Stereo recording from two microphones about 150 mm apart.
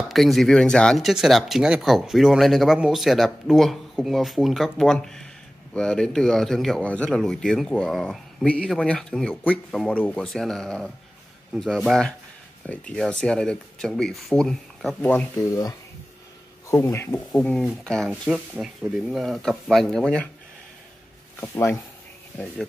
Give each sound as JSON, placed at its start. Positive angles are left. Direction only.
{"t": 0.1, "sound": "speech", "side_deg": 0}
{"t": 15.3, "sound": "speech", "side_deg": 20}
{"t": 17.3, "sound": "speech", "side_deg": 5}
{"t": 21.4, "sound": "speech", "side_deg": 15}